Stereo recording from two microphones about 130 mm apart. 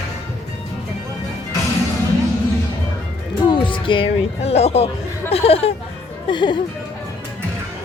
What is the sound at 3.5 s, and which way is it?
Speech, 40° left (ahead or behind).